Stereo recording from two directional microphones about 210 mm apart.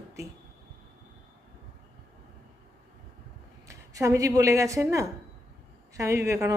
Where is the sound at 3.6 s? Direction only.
15° right (ahead or behind).